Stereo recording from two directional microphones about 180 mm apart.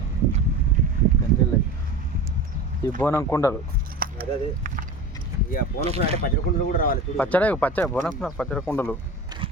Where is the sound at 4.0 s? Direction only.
55° right (ahead or behind).